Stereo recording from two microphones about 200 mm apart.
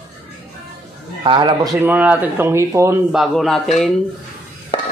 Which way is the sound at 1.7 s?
10° right (ahead or behind).